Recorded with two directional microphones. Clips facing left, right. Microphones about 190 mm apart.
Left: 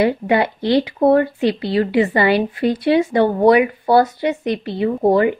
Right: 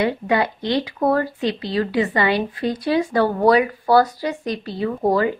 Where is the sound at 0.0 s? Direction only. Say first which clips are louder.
Left 4 dB; 30° left (ahead or behind).